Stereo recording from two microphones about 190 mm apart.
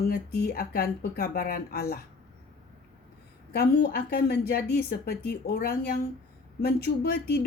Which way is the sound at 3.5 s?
55° left (ahead or behind).